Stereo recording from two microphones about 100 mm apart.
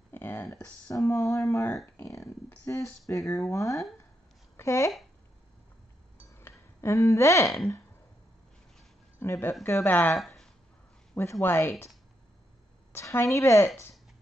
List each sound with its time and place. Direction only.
0.1 s a sound: 20° left (ahead or behind)
0.8 s speech: 30° left (ahead or behind)
6.3 s speech: 25° left (ahead or behind)
9.2 s speech: 25° left (ahead or behind)
10.1 s a sound: centre (ahead or behind)
11.1 s speech: 25° left (ahead or behind)
12.9 s speech: 25° left (ahead or behind)